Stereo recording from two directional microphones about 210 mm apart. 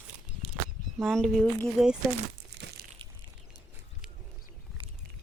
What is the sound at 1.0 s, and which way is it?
Speech, centre (ahead or behind).